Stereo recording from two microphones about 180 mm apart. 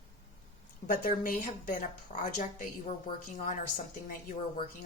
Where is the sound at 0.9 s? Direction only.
50° left (ahead or behind).